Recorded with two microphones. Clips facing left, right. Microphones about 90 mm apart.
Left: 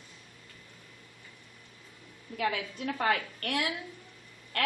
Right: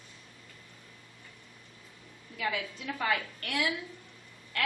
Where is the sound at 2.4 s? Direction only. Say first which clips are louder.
Left 2 dB; 50° left (ahead or behind).